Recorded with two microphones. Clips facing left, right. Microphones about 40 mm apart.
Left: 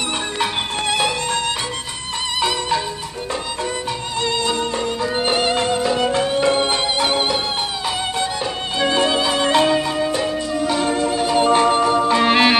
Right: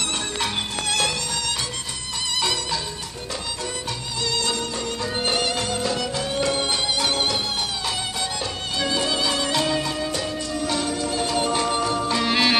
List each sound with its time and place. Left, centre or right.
0.4 s music: centre
4.2 s music: left
8.7 s music: left
9.8 s music: centre